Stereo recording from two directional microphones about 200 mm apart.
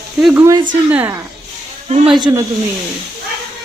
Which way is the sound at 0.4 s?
20° right (ahead or behind).